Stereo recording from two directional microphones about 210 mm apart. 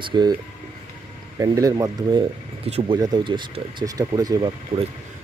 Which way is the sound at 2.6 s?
30° right (ahead or behind).